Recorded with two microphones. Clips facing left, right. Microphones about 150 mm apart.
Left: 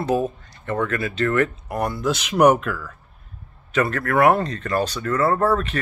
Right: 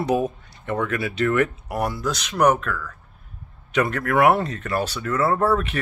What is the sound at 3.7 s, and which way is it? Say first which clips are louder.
A man's voice: even; 15° right (ahead or behind).